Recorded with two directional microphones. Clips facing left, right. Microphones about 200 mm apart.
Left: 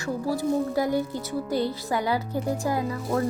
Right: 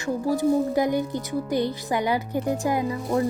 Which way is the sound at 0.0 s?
20° right (ahead or behind).